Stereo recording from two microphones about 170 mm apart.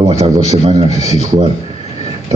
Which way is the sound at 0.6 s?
40° right (ahead or behind).